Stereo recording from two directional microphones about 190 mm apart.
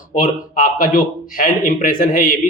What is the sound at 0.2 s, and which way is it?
A man's voice, 45° left (ahead or behind).